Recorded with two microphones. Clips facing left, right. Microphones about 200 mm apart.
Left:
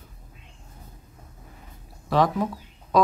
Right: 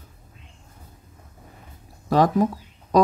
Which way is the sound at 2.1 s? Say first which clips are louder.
Right 3 dB; 45° right (ahead or behind).